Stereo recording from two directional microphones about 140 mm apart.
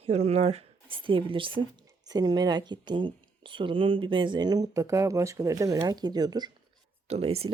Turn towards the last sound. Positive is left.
turn(degrees=-45)  # may be behind; listen again after turning